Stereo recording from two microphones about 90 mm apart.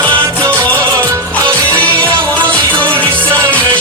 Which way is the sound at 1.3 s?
15° left (ahead or behind).